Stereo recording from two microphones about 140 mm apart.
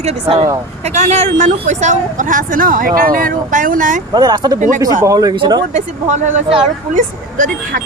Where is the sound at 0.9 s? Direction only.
55° right (ahead or behind).